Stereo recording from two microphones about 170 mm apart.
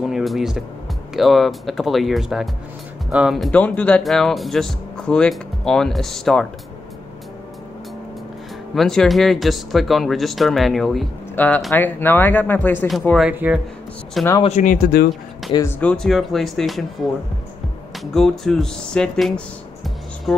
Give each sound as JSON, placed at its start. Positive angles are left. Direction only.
{"t": 0.0, "sound": "speech", "side_deg": 0}
{"t": 8.7, "sound": "speech", "side_deg": 0}
{"t": 13.2, "sound": "speech", "side_deg": -10}
{"t": 14.4, "sound": "speech", "side_deg": 45}
{"t": 15.8, "sound": "speech", "side_deg": 5}
{"t": 17.9, "sound": "speech", "side_deg": 0}